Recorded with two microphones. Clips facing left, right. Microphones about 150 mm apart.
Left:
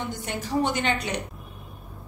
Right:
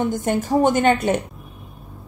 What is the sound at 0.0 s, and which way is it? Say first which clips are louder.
A woman's voice: right 11 dB; 50° right (ahead or behind).